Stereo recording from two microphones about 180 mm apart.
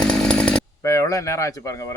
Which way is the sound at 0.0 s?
5° left (ahead or behind).